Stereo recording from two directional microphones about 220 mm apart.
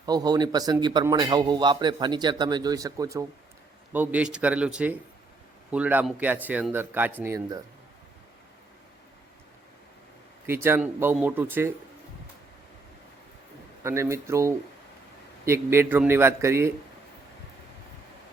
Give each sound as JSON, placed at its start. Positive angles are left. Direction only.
{"t": 0.0, "sound": "a man's voice", "side_deg": -15}
{"t": 10.4, "sound": "speech", "side_deg": -10}
{"t": 13.8, "sound": "speech", "side_deg": -10}